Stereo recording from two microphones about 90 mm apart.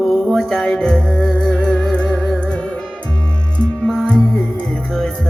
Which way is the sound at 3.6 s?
10° left (ahead or behind).